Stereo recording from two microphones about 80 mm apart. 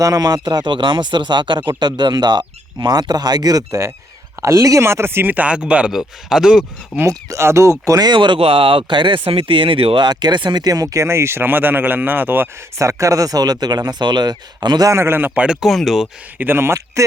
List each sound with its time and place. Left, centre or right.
0.0 s speech: right; by 6.7 s centre
7.1 s speech: right
7.9 s speech: right
14.8 s a man's voice: right
15.6 s speech: centre
16.4 s speech: right